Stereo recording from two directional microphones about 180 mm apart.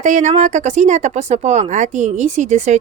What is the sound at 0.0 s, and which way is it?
Speech, 40° right (ahead or behind).